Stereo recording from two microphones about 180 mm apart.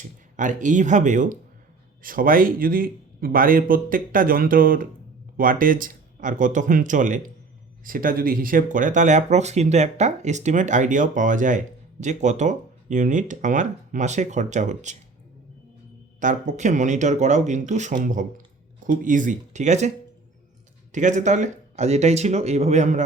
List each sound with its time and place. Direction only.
0.0 s speech: 45° right (ahead or behind)
16.2 s speech: 45° right (ahead or behind)
20.9 s speech: 45° right (ahead or behind)